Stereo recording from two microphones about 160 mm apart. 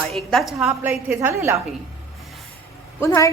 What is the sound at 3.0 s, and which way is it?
Speech, 20° left (ahead or behind).